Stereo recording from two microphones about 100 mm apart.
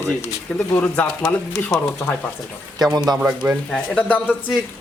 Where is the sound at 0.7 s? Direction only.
15° left (ahead or behind).